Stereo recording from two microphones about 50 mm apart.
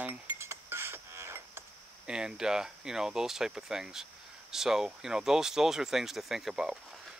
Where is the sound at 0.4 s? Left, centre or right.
Right.